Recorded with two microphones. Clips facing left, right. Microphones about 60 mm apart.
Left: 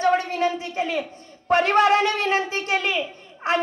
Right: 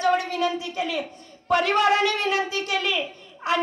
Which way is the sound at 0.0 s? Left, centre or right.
Left.